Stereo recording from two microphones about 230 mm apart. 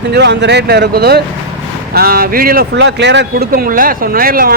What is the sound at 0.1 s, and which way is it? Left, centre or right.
Speech, right.